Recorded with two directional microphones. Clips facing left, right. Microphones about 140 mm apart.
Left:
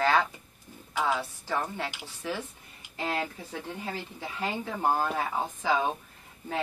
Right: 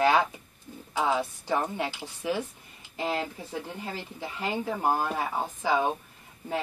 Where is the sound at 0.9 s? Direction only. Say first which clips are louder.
Right 2 dB; 20° right (ahead or behind).